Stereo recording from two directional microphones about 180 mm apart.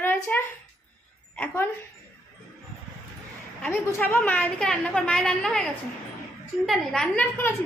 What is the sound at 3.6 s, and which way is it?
A woman's voice, 10° left (ahead or behind).